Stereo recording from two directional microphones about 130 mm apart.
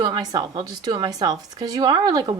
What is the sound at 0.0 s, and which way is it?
Speech, 30° right (ahead or behind).